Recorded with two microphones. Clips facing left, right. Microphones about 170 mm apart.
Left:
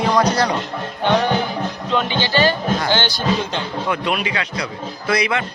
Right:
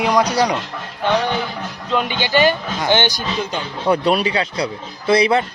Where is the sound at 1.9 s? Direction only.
10° right (ahead or behind).